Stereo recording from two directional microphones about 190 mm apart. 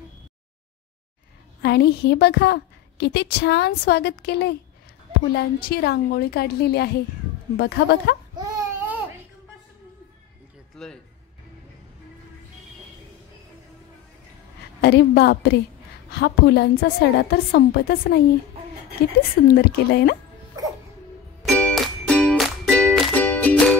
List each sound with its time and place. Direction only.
1.6 s a woman's voice: 60° left (ahead or behind)
5.7 s a woman's voice: 55° left (ahead or behind)
8.4 s a sound: 10° right (ahead or behind)
10.8 s speech: 5° left (ahead or behind)
14.8 s a woman's voice: 60° left (ahead or behind)
19.4 s a woman's voice: 55° left (ahead or behind)
21.4 s music: 5° left (ahead or behind)